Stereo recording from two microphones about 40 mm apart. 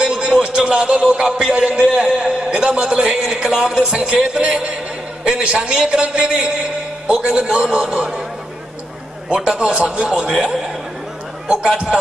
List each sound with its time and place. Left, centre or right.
0.0 s music: right
1.5 s a man's voice: right
2.0 s a sound: centre
3.6 s a man's voice: right
9.3 s a man's voice: centre
10.3 s a man's voice: centre
11.4 s a man's voice: right